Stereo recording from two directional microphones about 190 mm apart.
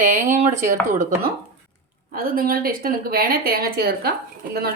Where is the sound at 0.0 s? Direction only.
40° right (ahead or behind).